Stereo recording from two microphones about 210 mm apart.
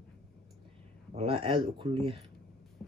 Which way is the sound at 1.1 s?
30° right (ahead or behind).